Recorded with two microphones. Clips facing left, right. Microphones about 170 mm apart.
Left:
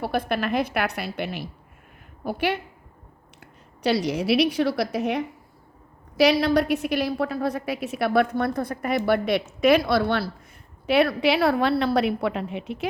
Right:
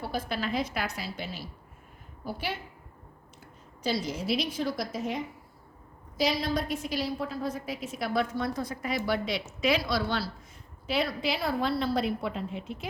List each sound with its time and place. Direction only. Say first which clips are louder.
0.0 s a woman's voice: left 7 dB; 65° left (ahead or behind)